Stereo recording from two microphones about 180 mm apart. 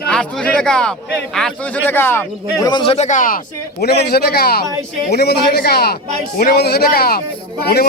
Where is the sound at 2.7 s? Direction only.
30° left (ahead or behind).